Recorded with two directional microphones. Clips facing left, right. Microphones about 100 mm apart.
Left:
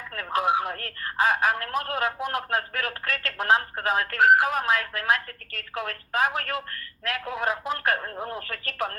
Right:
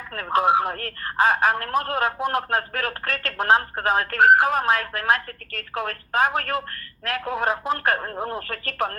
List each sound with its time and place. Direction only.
0.1 s speech: 40° right (ahead or behind)